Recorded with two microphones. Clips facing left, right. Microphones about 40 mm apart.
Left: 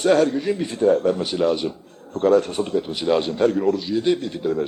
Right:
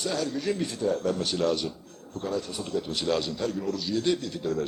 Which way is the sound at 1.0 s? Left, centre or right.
Left.